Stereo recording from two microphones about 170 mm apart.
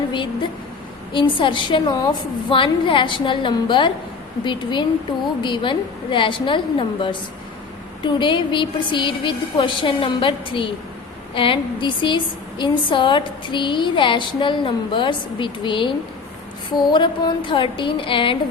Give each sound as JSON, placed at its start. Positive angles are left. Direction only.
{"t": 1.1, "sound": "a woman's voice", "side_deg": 30}